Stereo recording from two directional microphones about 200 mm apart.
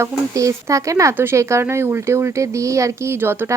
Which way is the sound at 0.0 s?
15° right (ahead or behind).